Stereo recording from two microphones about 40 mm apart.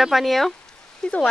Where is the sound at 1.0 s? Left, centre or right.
Left.